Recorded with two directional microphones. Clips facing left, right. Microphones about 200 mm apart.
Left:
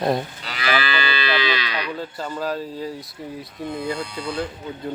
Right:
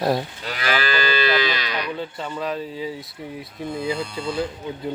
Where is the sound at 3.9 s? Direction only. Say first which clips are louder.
Right 1 dB; 25° right (ahead or behind).